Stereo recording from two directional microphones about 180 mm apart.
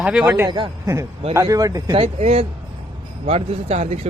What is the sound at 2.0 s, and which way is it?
A man's voice, 35° right (ahead or behind).